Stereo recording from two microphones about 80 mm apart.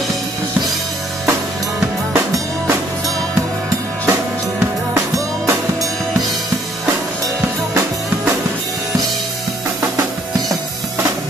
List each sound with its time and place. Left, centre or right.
2.1 s music: right
5.1 s music: right